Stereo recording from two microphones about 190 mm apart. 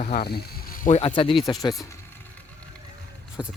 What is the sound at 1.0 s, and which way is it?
Speech, 25° left (ahead or behind).